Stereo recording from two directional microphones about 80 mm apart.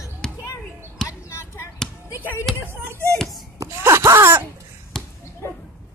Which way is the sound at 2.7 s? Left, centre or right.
Right.